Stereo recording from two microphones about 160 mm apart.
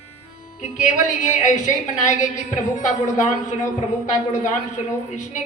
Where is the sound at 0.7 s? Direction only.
50° left (ahead or behind).